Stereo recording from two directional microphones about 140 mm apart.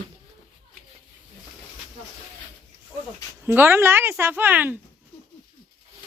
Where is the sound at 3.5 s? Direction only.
15° right (ahead or behind).